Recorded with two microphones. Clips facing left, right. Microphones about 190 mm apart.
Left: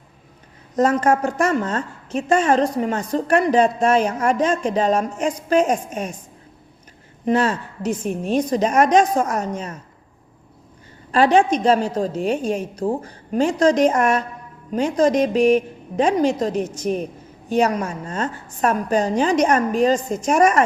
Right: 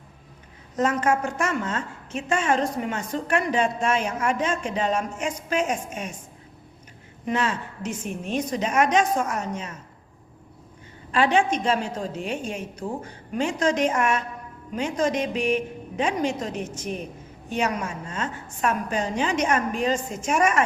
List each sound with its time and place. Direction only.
0.8 s a woman's voice: 35° left (ahead or behind)
7.3 s a woman's voice: 35° left (ahead or behind)
11.1 s a woman's voice: 40° left (ahead or behind)